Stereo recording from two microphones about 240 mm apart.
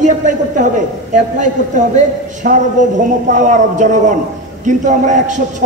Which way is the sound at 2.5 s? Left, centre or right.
Right.